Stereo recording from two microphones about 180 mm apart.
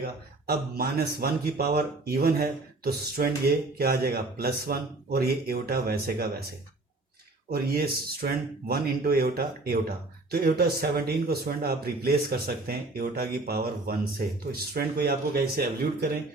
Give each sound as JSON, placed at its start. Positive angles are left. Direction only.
{"t": 0.4, "sound": "speech", "side_deg": -60}
{"t": 7.5, "sound": "speech", "side_deg": -60}